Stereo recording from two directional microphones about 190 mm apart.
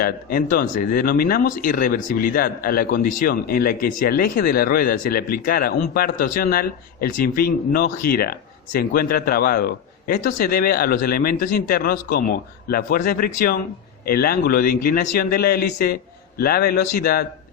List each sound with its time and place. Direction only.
0.0 s speech: 50° left (ahead or behind)